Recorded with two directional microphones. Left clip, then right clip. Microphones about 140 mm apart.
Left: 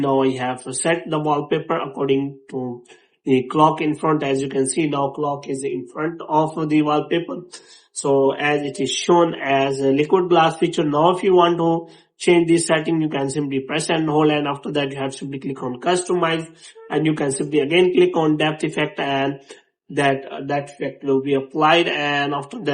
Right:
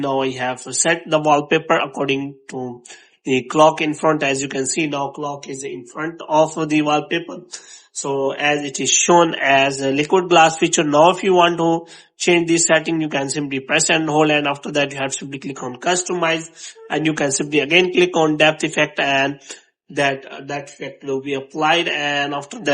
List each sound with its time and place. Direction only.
0.0 s speech: 25° right (ahead or behind)
1.1 s speech: 40° right (ahead or behind)
9.0 s speech: 40° right (ahead or behind); by 22.4 s 20° right (ahead or behind)